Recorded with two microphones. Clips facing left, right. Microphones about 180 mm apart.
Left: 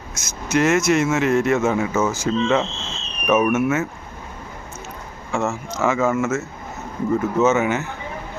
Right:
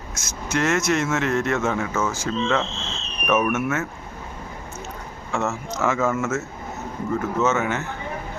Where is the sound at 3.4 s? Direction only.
15° left (ahead or behind).